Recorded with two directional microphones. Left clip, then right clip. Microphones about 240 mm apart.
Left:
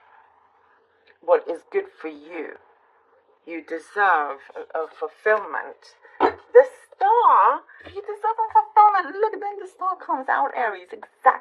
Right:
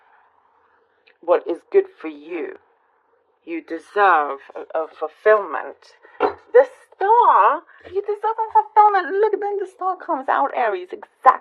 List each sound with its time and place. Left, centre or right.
1.2 s a woman's voice: right